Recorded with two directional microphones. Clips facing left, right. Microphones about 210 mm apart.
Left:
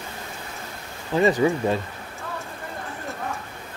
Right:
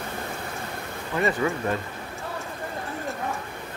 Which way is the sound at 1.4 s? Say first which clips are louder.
Left 5 dB; 20° left (ahead or behind).